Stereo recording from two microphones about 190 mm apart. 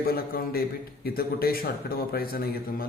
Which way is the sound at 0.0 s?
50° left (ahead or behind).